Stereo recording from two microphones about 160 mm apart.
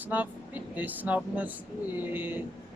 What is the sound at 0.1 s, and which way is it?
Speech, 10° right (ahead or behind).